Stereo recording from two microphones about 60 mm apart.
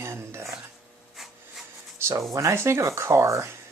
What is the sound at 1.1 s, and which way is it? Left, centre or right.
Rub, centre.